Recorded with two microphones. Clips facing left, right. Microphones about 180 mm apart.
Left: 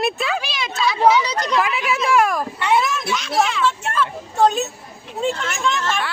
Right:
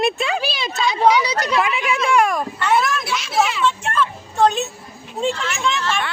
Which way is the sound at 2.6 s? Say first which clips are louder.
Even; 15° left (ahead or behind).